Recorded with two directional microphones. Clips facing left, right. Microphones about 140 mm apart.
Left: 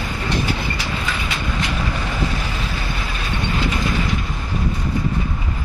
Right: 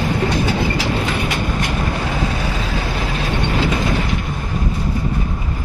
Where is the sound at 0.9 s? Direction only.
35° right (ahead or behind).